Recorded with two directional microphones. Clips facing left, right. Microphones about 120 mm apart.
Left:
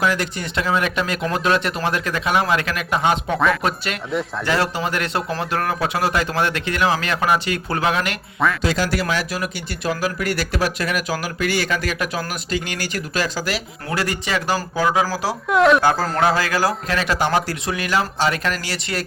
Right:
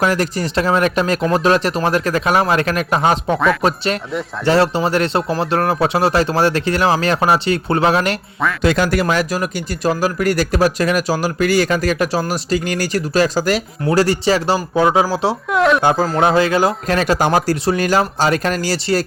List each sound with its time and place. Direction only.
0.0 s speech: 40° right (ahead or behind)
8.6 s speech: 55° right (ahead or behind); by 15.4 s 25° right (ahead or behind)
15.4 s speech: centre (ahead or behind)
15.8 s speech: 20° right (ahead or behind)
16.8 s speech: 45° right (ahead or behind)